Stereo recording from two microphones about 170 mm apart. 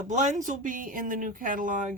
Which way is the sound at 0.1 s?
45° right (ahead or behind).